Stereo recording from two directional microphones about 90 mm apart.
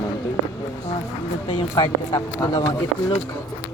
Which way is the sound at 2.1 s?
45° left (ahead or behind).